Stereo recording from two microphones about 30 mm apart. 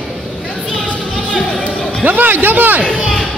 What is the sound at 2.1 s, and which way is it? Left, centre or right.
Speech, right.